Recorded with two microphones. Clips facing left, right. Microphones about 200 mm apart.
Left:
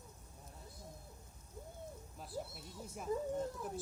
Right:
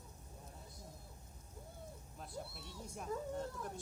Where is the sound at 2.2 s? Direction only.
5° left (ahead or behind).